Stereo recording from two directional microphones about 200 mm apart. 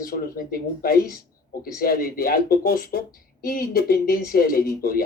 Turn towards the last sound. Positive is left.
turn(degrees=50)  # may be behind; listen again after turning